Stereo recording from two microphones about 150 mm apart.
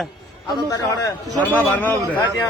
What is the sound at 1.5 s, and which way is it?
Speech, 10° left (ahead or behind).